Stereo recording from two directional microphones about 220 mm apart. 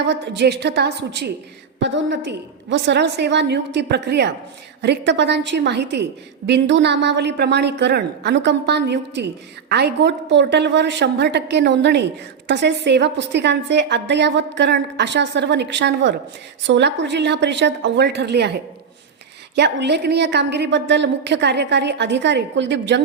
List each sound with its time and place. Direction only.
0.1 s a woman's voice: 50° right (ahead or behind)
19.5 s a woman's voice: 50° right (ahead or behind)